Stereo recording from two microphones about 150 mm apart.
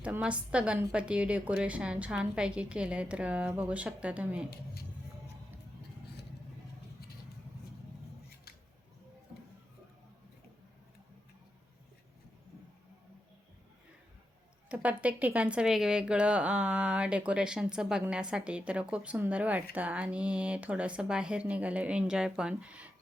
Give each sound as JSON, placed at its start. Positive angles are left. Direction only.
{"t": 0.0, "sound": "a woman's voice", "side_deg": -10}
{"t": 4.5, "sound": "speech", "side_deg": 90}
{"t": 14.7, "sound": "a woman's voice", "side_deg": -10}